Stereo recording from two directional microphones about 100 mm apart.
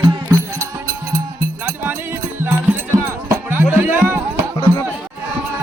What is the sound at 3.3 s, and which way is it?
Music, 20° right (ahead or behind).